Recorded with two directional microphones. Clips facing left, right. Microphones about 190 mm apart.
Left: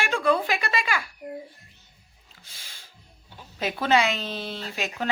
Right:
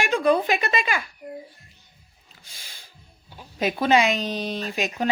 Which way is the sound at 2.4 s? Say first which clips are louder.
Right 2 dB; 15° right (ahead or behind).